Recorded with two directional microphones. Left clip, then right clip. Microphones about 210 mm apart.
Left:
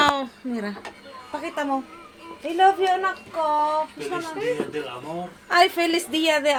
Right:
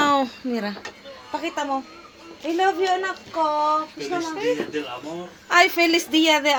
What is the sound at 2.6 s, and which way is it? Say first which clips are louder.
Speech: left 3 dB; 20° right (ahead or behind).